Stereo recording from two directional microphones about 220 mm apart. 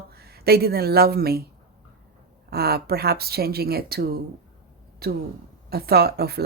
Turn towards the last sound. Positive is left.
turn(degrees=-45)  # may be behind; listen again after turning